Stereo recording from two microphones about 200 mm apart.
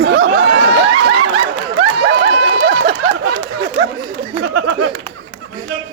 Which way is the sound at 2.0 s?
60° right (ahead or behind).